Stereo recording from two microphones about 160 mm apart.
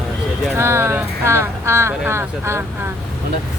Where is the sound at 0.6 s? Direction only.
15° right (ahead or behind).